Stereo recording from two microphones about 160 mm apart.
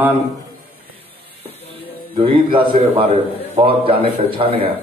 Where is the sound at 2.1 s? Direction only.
35° right (ahead or behind).